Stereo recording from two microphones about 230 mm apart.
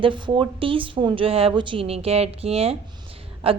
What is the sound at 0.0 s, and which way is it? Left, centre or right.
Speech, right.